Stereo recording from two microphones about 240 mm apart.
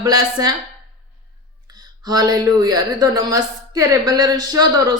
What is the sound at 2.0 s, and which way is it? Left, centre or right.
Child singing, centre.